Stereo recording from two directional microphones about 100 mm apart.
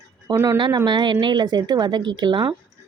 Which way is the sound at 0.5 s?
45° right (ahead or behind).